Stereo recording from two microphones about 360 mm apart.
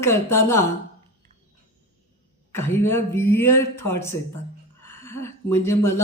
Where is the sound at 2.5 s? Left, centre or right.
Centre.